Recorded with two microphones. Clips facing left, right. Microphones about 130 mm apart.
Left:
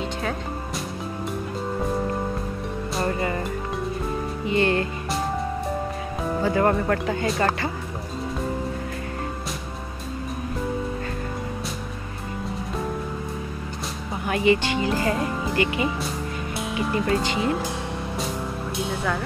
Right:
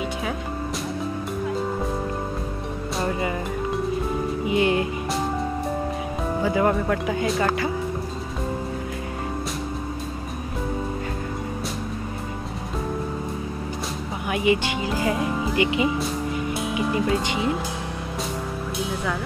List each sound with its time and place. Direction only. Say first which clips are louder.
3.0 s music: even; 10° right (ahead or behind)
4.5 s music: even; 10° right (ahead or behind)
6.4 s speech: even; 5° right (ahead or behind)
14.2 s speech: left 1 dB; 10° right (ahead or behind)